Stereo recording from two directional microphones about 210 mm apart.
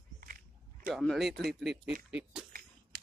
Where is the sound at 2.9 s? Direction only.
45° right (ahead or behind).